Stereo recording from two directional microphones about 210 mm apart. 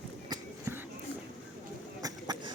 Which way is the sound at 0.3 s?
15° right (ahead or behind).